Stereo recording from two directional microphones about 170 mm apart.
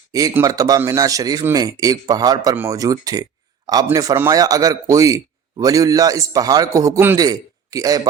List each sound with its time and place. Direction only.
0.1 s a man's voice: 20° right (ahead or behind)